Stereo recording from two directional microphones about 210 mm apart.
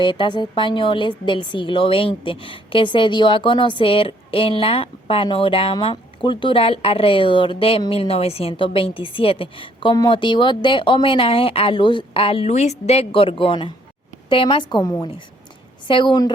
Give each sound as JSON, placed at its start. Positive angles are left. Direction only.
{"t": 0.0, "sound": "speech", "side_deg": 20}